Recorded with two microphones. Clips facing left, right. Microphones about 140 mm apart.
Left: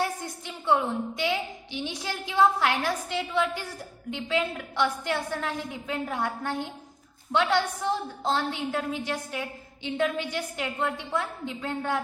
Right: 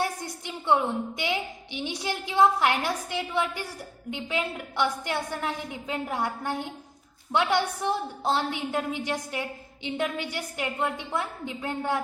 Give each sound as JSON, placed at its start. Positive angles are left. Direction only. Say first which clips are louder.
{"t": 0.0, "sound": "a sound", "louder": "even", "side_deg": -15}
{"t": 1.2, "sound": "a woman's voice", "louder": "left 1 dB", "side_deg": -15}
{"t": 4.1, "sound": "a woman's voice", "louder": "left 2 dB", "side_deg": -15}